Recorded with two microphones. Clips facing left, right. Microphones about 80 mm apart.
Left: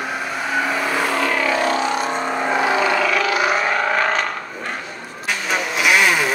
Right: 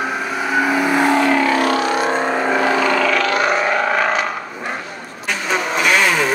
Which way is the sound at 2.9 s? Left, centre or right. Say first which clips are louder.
Right 2 dB; centre.